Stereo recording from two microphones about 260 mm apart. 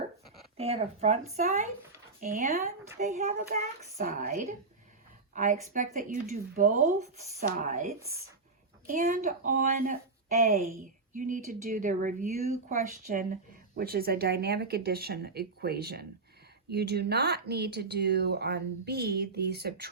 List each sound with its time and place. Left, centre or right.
0.5 s speech: right